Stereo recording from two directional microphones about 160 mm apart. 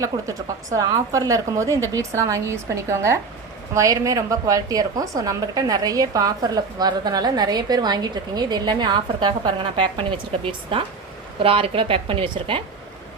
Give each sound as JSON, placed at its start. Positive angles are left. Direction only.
{"t": 0.0, "sound": "a woman's voice", "side_deg": -20}